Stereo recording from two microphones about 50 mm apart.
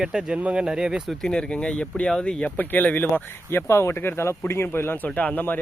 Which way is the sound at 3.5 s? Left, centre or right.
Left.